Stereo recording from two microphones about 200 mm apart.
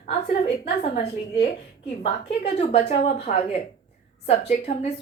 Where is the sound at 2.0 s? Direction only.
35° left (ahead or behind).